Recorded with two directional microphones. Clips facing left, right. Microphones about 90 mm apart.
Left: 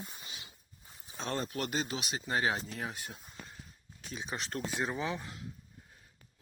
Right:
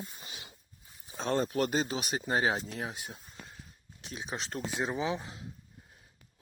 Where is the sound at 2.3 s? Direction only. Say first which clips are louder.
Right 2 dB; 30° right (ahead or behind).